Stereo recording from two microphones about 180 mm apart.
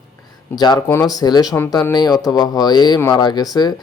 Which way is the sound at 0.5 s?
25° left (ahead or behind).